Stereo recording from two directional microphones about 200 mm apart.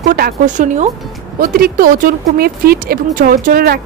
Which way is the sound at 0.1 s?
40° right (ahead or behind).